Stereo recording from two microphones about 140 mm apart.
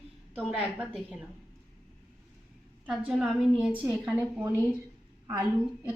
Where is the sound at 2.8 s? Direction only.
10° right (ahead or behind).